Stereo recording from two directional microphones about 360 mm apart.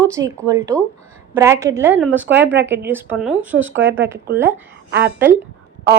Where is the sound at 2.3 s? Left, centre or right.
Right.